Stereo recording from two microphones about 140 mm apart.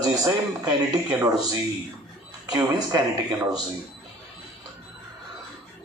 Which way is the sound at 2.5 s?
30° right (ahead or behind).